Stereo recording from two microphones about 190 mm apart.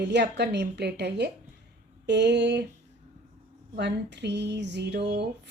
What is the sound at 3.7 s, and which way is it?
Speech, 65° right (ahead or behind).